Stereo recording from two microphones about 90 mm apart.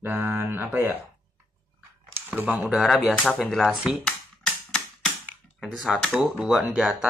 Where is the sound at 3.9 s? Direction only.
10° left (ahead or behind).